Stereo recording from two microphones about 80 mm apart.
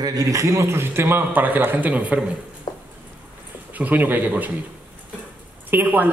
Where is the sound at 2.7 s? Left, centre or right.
Left.